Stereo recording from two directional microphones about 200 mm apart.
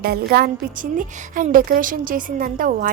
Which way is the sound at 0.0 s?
50° right (ahead or behind).